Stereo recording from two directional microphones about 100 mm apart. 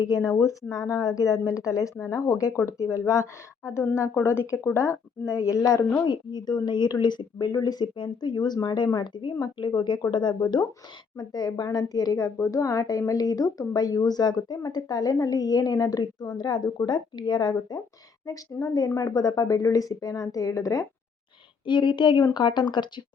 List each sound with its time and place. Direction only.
0.0 s speech: 35° left (ahead or behind)
6.1 s a woman's voice: 45° left (ahead or behind)
21.7 s a woman's voice: 50° left (ahead or behind)